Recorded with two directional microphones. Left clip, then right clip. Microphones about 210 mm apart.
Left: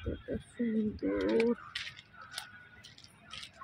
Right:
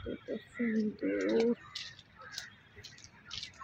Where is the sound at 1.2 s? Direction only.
20° left (ahead or behind).